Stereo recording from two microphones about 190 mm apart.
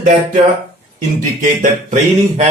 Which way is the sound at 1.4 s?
40° right (ahead or behind).